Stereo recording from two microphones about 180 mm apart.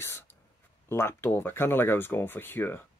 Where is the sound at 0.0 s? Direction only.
15° left (ahead or behind).